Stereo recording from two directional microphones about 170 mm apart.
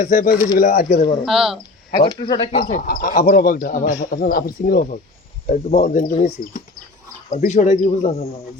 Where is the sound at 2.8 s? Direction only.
60° left (ahead or behind).